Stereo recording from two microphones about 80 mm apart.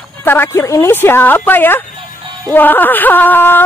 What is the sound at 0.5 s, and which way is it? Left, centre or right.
Speech, left.